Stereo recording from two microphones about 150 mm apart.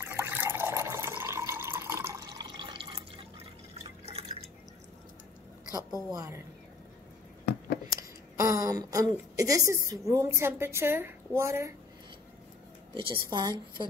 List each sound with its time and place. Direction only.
0.0 s water: 15° right (ahead or behind); by 3.4 s 35° right (ahead or behind)
4.0 s drip: 40° right (ahead or behind)
6.0 s a woman's voice: 25° right (ahead or behind)
7.9 s a woman's voice: 20° right (ahead or behind)
12.9 s a woman's voice: 35° right (ahead or behind)